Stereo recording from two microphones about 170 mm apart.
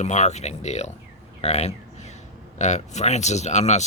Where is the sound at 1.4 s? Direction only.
40° left (ahead or behind).